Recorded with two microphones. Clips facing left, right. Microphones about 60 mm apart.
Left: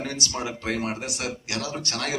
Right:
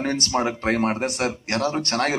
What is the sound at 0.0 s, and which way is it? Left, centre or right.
A man's voice, right.